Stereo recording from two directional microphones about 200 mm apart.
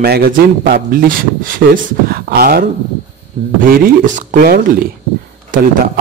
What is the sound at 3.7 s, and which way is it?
Speech, 45° right (ahead or behind).